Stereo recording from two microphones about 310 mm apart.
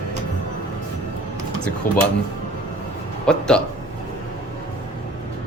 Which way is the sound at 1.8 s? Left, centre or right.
Left.